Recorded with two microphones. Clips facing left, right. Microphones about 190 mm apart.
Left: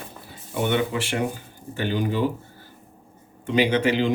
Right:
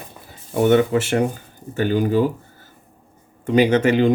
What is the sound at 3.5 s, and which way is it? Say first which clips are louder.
Speech: right 5 dB; 45° right (ahead or behind).